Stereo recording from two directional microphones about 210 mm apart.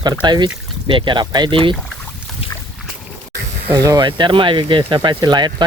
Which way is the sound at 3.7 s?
15° right (ahead or behind).